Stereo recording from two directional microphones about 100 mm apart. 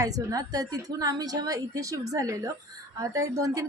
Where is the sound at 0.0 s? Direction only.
35° right (ahead or behind).